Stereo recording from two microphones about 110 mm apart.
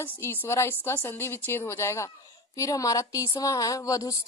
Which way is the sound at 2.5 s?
30° left (ahead or behind).